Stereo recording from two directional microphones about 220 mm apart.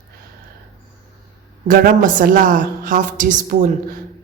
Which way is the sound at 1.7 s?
40° right (ahead or behind).